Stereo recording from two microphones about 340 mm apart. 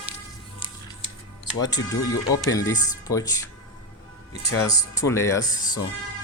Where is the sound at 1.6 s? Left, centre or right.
Centre.